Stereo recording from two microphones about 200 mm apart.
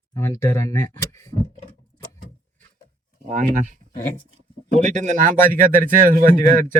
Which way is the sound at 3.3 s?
40° right (ahead or behind).